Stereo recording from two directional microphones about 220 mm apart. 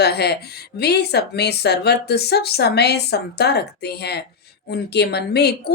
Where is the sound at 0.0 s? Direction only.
45° left (ahead or behind).